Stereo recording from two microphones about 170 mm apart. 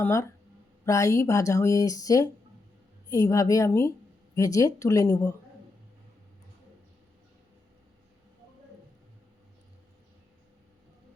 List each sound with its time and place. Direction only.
0.0 s speech: 15° left (ahead or behind)